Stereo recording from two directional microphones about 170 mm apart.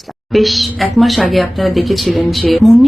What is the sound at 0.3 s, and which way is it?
Speech, centre (ahead or behind).